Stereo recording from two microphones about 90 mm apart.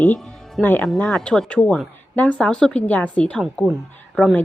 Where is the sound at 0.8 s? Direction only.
5° left (ahead or behind).